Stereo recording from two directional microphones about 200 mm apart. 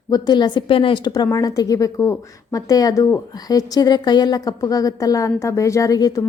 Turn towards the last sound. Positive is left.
turn(degrees=20)  # may be behind; listen again after turning